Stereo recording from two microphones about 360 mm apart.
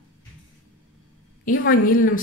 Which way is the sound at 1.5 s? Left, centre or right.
Left.